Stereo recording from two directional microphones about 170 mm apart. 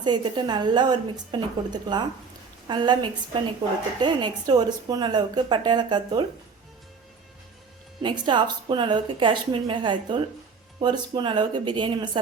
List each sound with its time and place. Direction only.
0.0 s a woman's voice: 25° right (ahead or behind)
8.0 s a woman's voice: 25° right (ahead or behind)